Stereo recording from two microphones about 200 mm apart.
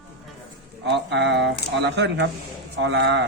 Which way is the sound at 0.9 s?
60° right (ahead or behind).